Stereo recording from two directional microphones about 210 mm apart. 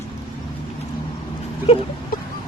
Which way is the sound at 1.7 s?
30° left (ahead or behind).